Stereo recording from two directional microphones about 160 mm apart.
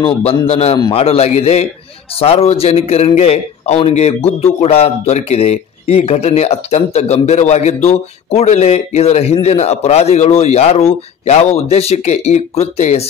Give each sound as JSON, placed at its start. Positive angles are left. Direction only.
{"t": 0.0, "sound": "a man's voice", "side_deg": 40}